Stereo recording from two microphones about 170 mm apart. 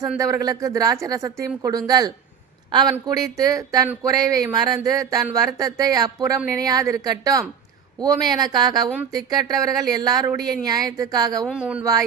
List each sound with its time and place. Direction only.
0.2 s speech: 20° right (ahead or behind)
11.4 s speech: 5° right (ahead or behind)
11.8 s speech: 20° right (ahead or behind)